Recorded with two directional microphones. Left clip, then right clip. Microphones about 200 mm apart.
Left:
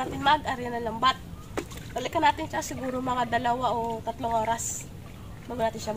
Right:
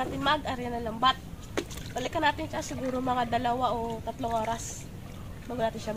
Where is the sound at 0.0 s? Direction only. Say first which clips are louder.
Left 4 dB; 15° left (ahead or behind).